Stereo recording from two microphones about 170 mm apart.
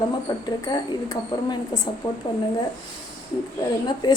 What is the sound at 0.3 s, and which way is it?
A woman's voice, 25° left (ahead or behind).